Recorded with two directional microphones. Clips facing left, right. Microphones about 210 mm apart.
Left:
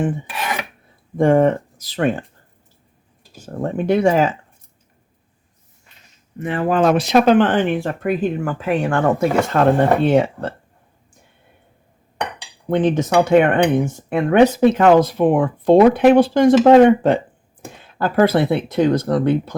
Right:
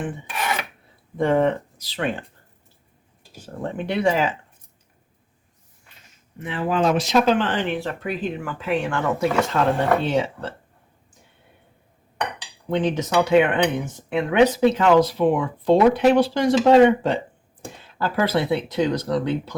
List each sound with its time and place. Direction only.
1.1 s speech: 50° left (ahead or behind)
3.4 s speech: 45° left (ahead or behind)
6.4 s speech: 50° left (ahead or behind)
12.7 s speech: 50° left (ahead or behind)